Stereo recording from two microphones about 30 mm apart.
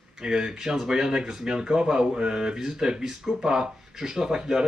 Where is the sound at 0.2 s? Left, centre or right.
Centre.